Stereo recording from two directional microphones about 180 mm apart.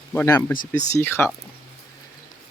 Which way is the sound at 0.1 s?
10° left (ahead or behind).